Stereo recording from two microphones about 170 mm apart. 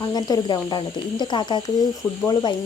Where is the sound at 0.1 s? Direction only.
25° left (ahead or behind).